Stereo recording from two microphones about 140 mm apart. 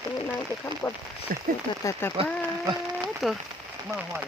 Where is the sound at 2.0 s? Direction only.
15° left (ahead or behind).